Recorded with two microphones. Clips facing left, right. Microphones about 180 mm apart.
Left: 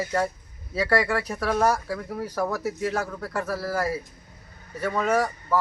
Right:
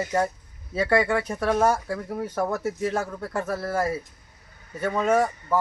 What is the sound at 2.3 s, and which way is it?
Speech, 25° right (ahead or behind).